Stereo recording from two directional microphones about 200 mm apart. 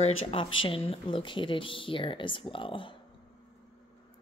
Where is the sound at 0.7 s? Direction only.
25° left (ahead or behind).